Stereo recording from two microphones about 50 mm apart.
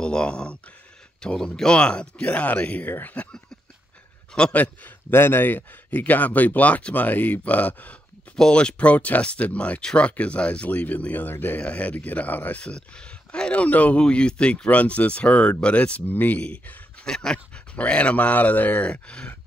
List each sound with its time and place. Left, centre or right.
0.0 s speech: centre; by 3.3 s left
4.5 s speech: left
5.1 s speech: left
8.4 s speech: centre; by 11.6 s left
11.6 s speech: left
12.5 s speech: centre
13.9 s speech: centre
16.1 s speech: left
17.0 s dog: centre
17.7 s speech: left